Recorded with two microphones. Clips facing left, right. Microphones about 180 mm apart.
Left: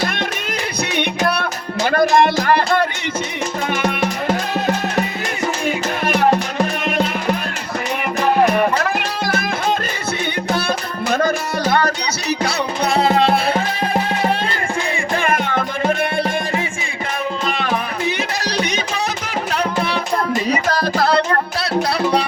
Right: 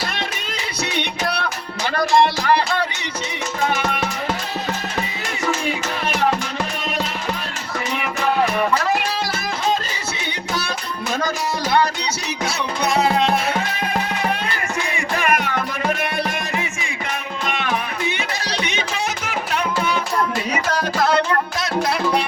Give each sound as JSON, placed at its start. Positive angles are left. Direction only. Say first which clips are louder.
{"t": 1.2, "sound": "music", "louder": "left 4 dB", "side_deg": 50}
{"t": 5.6, "sound": "music", "louder": "left 4 dB", "side_deg": 50}
{"t": 10.5, "sound": "music", "louder": "left 4 dB", "side_deg": 55}
{"t": 12.9, "sound": "music", "louder": "left 3 dB", "side_deg": 30}